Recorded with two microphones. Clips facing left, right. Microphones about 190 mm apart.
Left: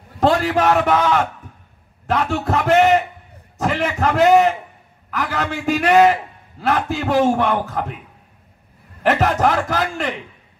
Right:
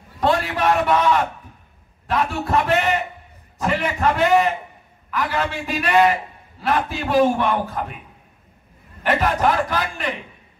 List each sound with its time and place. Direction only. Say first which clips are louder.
0.2 s a man's voice: left 4 dB; 80° left
2.0 s a sound: left 2 dB; 80° left
3.5 s a man's voice: left 2 dB; 80° left
9.0 s a man's voice: left 2 dB; 80° left